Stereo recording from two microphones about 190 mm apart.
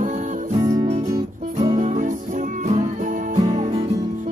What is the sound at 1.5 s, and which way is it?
Music, 35° right (ahead or behind).